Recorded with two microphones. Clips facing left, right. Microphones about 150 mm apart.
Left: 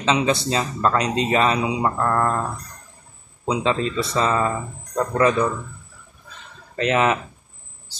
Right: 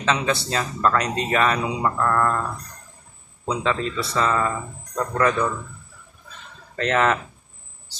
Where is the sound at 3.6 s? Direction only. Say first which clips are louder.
Left 2 dB; 20° left (ahead or behind).